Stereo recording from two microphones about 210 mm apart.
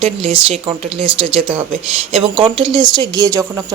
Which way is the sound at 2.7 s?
20° right (ahead or behind).